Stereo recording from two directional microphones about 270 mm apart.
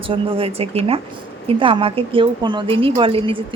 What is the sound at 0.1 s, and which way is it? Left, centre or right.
Speech, centre.